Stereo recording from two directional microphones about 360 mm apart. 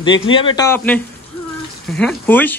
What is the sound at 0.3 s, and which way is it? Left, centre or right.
Speech, centre.